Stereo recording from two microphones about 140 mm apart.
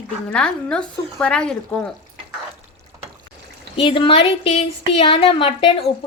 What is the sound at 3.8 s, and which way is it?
A woman's voice, 40° left (ahead or behind).